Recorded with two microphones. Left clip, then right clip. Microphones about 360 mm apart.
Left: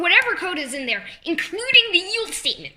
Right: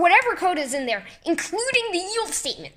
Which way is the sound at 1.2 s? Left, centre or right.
Right.